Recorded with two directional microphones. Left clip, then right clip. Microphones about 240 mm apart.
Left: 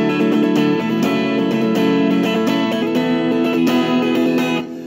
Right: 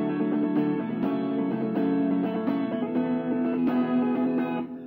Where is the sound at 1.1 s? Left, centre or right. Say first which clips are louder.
Left 10 dB; left.